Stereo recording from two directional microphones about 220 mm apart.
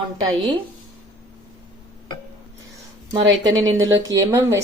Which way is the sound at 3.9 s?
15° right (ahead or behind).